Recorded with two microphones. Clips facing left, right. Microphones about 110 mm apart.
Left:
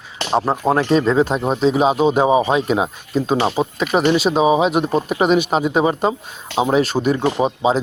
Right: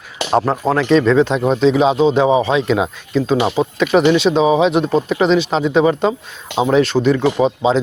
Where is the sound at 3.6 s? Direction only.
15° left (ahead or behind).